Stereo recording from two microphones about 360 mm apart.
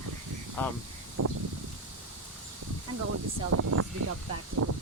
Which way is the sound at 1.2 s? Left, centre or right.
Right.